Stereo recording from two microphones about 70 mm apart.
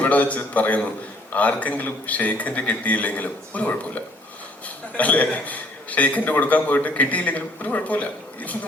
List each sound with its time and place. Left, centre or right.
0.0 s a man's voice: left